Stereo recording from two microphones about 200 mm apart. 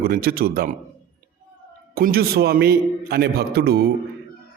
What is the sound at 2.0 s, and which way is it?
A man's voice, 50° right (ahead or behind).